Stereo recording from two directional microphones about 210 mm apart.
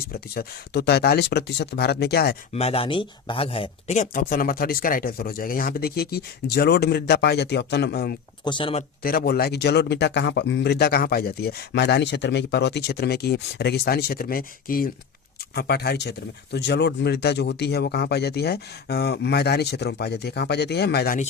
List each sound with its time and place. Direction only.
0.1 s speech: 50° left (ahead or behind)
2.5 s speech: 30° left (ahead or behind); by 8.1 s 50° left (ahead or behind)
8.4 s speech: 25° left (ahead or behind)
9.0 s speech: 45° left (ahead or behind)